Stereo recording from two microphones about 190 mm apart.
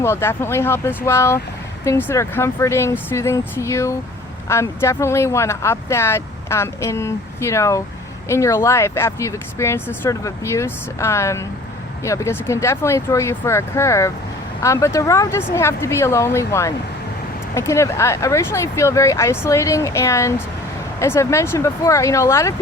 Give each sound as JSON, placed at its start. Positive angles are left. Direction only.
{"t": 0.0, "sound": "speech", "side_deg": 15}